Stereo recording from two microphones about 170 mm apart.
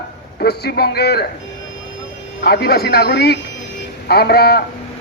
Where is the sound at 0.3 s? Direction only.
70° left (ahead or behind).